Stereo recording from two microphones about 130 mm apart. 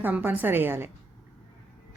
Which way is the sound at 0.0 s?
15° right (ahead or behind).